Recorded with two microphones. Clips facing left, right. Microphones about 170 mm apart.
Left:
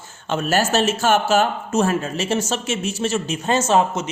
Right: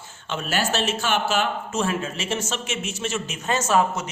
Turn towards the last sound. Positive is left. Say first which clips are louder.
# left 3 dB
turn(degrees=25)  # may be behind; listen again after turning